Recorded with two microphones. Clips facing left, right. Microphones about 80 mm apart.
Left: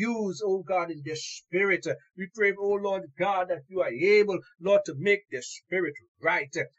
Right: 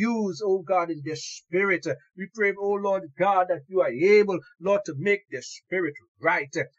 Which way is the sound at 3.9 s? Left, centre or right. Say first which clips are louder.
Right 2 dB; centre.